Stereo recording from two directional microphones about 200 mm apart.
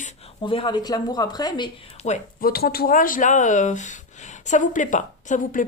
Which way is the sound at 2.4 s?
50° left (ahead or behind).